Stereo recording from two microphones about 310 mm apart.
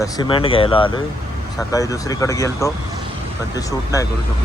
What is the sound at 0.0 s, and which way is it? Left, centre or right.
Speech, centre.